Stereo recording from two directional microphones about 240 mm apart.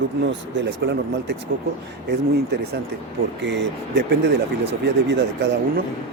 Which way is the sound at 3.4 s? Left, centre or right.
Right.